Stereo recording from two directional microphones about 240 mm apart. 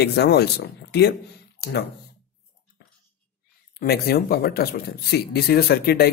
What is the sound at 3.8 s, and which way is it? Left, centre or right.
Speech, left.